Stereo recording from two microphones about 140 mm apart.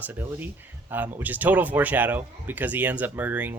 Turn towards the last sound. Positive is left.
turn(degrees=-10)  # may be behind; listen again after turning